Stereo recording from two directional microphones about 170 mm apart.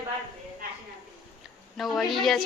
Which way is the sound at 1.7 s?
Centre (ahead or behind).